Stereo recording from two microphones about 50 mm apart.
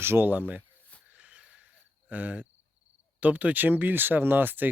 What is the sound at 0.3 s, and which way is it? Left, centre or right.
Speech, right.